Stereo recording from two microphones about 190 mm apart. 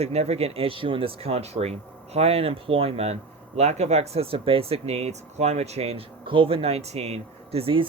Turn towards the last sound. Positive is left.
turn(degrees=-30)  # may be behind; listen again after turning